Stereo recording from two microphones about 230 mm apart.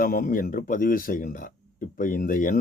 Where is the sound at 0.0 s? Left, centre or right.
Left.